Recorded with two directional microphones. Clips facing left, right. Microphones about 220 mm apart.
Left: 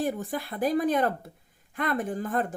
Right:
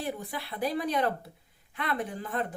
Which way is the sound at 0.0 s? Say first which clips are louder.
Left 6 dB; 45° left (ahead or behind).